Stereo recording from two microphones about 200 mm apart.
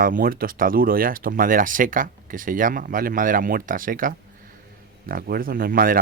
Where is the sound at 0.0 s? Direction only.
45° right (ahead or behind).